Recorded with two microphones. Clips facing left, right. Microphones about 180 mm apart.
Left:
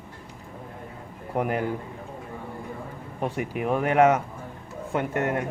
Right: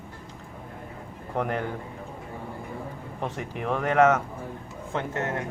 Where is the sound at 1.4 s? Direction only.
10° left (ahead or behind).